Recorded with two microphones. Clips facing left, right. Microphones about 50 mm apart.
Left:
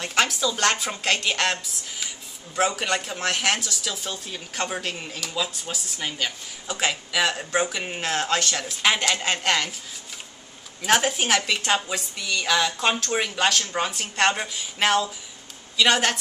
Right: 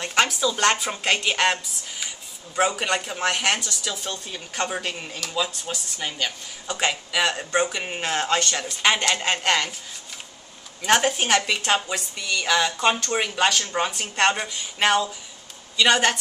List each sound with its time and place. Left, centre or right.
0.0 s a woman's voice: centre
10.8 s speech: centre